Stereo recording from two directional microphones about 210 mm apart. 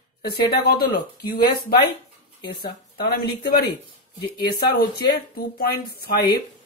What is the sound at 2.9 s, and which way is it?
Speech, 45° left (ahead or behind).